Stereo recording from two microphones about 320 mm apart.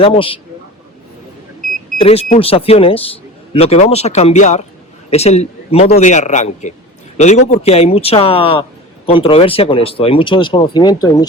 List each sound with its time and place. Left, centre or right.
0.0 s speech: centre
2.0 s speech: centre